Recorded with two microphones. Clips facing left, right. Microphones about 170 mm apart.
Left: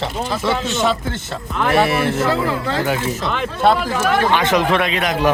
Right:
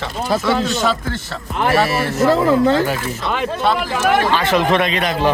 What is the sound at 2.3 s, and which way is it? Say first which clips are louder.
Speech: right 6 dB; 45° right (ahead or behind).